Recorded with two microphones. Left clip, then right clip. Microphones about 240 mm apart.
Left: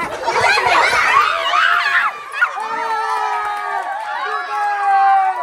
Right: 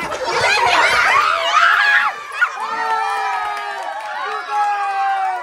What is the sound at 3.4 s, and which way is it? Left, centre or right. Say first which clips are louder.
Crowd: left 2 dB; centre.